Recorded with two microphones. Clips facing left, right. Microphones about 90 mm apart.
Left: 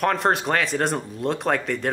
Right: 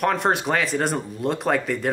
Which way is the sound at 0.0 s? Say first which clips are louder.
Even; centre (ahead or behind).